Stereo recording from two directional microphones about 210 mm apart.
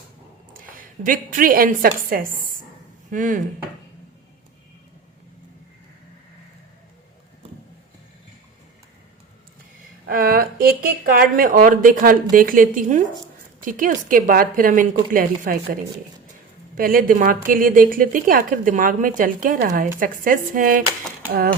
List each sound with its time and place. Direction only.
0.5 s a woman's voice: 40° right (ahead or behind)
10.1 s a woman's voice: 45° right (ahead or behind)